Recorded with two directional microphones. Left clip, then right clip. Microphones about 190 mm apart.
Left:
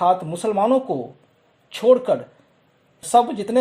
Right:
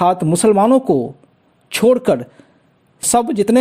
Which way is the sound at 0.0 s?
40° right (ahead or behind).